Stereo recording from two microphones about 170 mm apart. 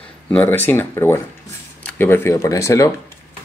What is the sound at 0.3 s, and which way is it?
Speech, 10° left (ahead or behind).